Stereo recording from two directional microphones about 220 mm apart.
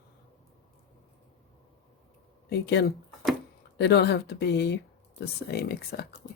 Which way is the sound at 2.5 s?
50° left (ahead or behind).